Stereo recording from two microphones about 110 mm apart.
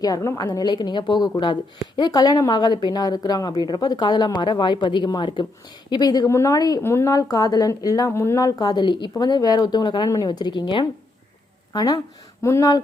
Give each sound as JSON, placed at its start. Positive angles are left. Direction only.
{"t": 0.0, "sound": "speech", "side_deg": 30}